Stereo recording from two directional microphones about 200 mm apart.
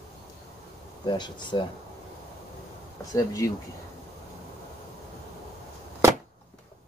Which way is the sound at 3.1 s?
15° left (ahead or behind).